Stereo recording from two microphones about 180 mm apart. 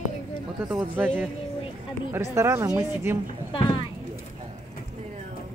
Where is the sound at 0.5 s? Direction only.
5° right (ahead or behind).